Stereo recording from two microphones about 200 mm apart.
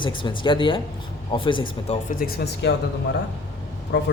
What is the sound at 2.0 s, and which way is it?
Speech, 45° left (ahead or behind).